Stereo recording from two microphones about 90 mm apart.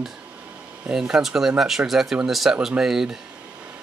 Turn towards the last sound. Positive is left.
turn(degrees=-5)  # may be behind; listen again after turning